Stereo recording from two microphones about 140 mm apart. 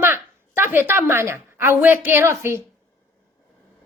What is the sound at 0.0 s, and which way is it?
A woman's voice, 15° right (ahead or behind).